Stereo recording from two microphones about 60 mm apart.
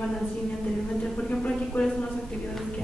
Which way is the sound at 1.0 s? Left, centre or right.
Centre.